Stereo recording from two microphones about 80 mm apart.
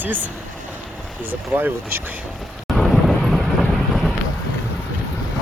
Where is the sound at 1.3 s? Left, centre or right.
Right.